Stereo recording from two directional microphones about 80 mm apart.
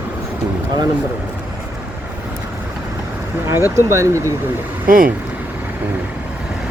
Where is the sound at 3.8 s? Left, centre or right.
Right.